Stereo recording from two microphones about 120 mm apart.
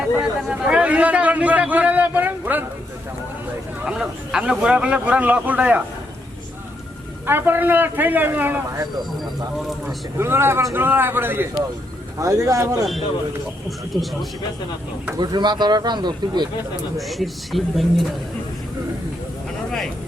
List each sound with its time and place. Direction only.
0.2 s a man's voice: 5° right (ahead or behind)
3.8 s a man's voice: 5° right (ahead or behind)
7.3 s a man's voice: 15° right (ahead or behind)
9.6 s speech: centre (ahead or behind)
10.2 s a man's voice: 20° right (ahead or behind)
13.7 s speech: centre (ahead or behind)
15.2 s speech: 35° right (ahead or behind)
17.0 s speech: centre (ahead or behind)